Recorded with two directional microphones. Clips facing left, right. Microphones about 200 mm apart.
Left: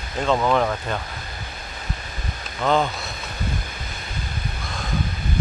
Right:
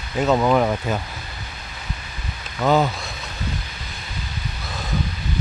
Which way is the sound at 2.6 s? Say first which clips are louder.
Right 2 dB; 5° right (ahead or behind).